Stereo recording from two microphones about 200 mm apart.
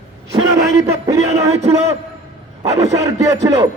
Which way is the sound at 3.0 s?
15° right (ahead or behind).